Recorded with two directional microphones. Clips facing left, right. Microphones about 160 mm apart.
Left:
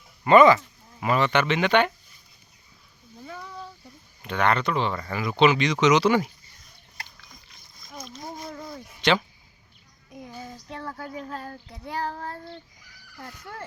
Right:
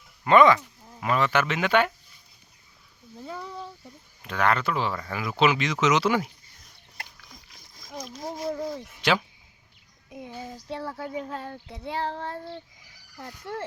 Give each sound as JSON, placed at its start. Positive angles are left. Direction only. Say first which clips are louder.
{"t": 0.3, "sound": "speech", "louder": "left 2 dB", "side_deg": 0}
{"t": 3.2, "sound": "a sound", "louder": "right 3 dB", "side_deg": -30}
{"t": 4.2, "sound": "speech", "louder": "left 1 dB", "side_deg": 0}
{"t": 9.0, "sound": "speech", "louder": "left 2 dB", "side_deg": -5}
{"t": 10.1, "sound": "child singing", "louder": "right 2 dB", "side_deg": -20}
{"t": 10.8, "sound": "speech", "louder": "right 1 dB", "side_deg": -5}
{"t": 11.0, "sound": "child singing", "louder": "right 2 dB", "side_deg": -20}